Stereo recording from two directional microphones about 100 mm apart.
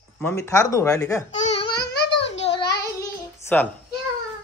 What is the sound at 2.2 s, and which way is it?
Cat, 80° left.